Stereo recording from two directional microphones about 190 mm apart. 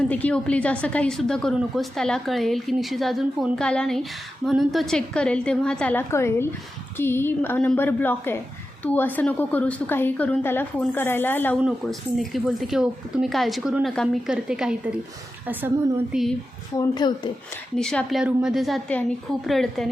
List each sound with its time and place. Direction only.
0.1 s a woman's voice: 5° left (ahead or behind)
11.6 s a woman's voice: centre (ahead or behind)
16.7 s a woman's voice: 20° left (ahead or behind)
17.7 s a woman's voice: 5° left (ahead or behind)